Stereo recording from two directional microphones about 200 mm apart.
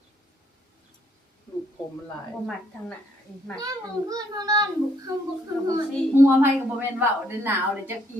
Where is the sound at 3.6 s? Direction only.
15° right (ahead or behind).